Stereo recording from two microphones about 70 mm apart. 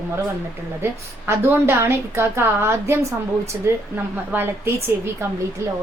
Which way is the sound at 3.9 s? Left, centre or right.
Right.